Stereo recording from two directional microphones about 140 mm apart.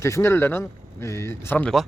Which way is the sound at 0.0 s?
20° left (ahead or behind).